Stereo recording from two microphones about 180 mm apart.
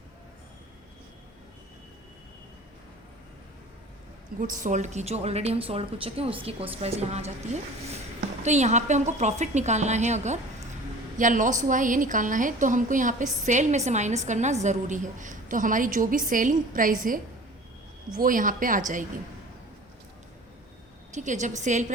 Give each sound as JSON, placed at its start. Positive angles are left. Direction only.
{"t": 4.4, "sound": "a woman's voice", "side_deg": -45}
{"t": 21.1, "sound": "a woman's voice", "side_deg": -40}